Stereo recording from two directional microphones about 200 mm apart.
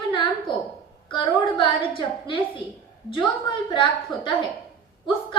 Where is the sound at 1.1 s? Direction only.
25° left (ahead or behind).